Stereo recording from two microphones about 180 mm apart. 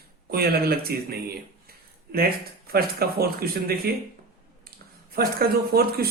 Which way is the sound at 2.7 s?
60° right (ahead or behind).